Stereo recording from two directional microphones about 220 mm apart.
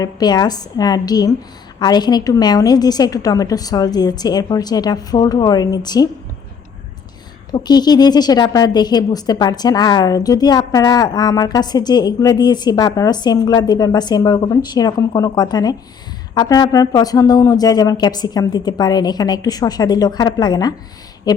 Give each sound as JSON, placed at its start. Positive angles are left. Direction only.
{"t": 0.0, "sound": "a woman's voice", "side_deg": 15}
{"t": 7.5, "sound": "a woman's voice", "side_deg": 20}